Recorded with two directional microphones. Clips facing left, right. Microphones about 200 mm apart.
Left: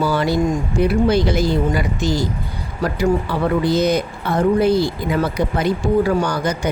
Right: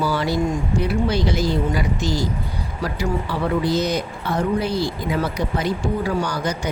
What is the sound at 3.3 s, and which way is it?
Speech, 55° left (ahead or behind).